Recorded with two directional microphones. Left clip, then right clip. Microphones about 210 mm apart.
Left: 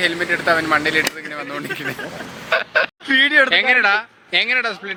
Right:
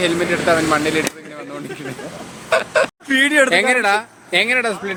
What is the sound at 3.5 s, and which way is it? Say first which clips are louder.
Speech: even; 10° right (ahead or behind).